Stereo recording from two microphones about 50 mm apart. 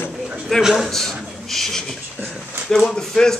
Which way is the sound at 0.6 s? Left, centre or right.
Centre.